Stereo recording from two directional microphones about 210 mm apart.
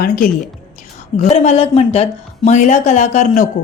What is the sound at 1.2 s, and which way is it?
A woman's voice, 30° left (ahead or behind).